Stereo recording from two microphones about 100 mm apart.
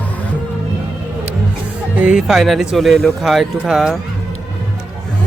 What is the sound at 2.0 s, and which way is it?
Speech, 10° right (ahead or behind).